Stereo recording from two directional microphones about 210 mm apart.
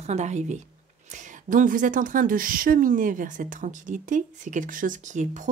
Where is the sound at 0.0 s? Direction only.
35° right (ahead or behind).